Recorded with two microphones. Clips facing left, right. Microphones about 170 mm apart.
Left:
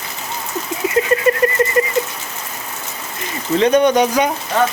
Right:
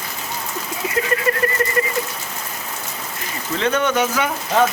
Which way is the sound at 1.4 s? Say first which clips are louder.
Left 5 dB; 20° left (ahead or behind).